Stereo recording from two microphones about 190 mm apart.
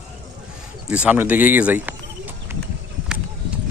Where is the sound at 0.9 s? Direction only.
5° right (ahead or behind).